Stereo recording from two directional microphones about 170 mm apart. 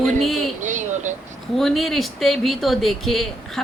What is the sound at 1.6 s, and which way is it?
Speech, centre (ahead or behind).